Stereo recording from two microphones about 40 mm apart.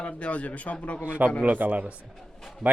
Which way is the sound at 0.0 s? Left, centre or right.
Left.